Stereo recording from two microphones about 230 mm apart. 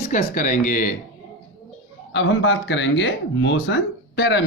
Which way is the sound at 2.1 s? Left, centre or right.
Left.